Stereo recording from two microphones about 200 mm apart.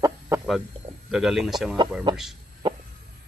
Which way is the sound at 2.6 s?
25° right (ahead or behind).